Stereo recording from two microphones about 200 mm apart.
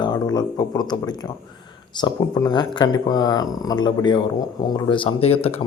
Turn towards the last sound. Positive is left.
turn(degrees=30)  # may be behind; listen again after turning